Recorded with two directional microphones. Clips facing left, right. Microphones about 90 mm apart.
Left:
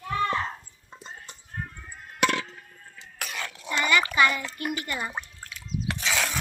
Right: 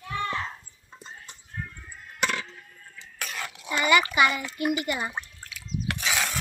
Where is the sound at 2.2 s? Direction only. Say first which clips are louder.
Left 4 dB; 65° left (ahead or behind).